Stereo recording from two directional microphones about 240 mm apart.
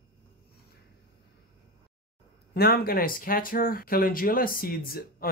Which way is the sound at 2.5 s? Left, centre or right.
Left.